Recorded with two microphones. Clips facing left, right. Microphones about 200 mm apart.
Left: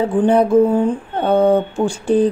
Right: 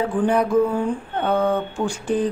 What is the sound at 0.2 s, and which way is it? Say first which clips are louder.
Speech: left 6 dB; 25° left (ahead or behind).